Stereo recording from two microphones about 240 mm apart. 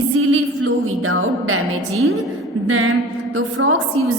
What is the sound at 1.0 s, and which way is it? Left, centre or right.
Speech, right.